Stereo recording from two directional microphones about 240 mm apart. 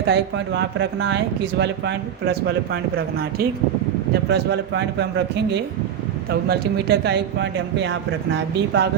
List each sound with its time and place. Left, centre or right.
0.1 s speech: right
4.3 s speech: right